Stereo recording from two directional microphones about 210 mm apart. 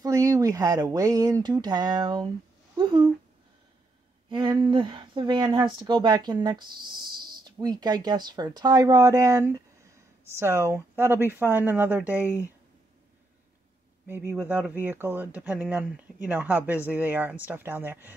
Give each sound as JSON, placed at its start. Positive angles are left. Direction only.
{"t": 0.0, "sound": "speech", "side_deg": -15}
{"t": 4.3, "sound": "speech", "side_deg": -20}
{"t": 14.3, "sound": "speech", "side_deg": -5}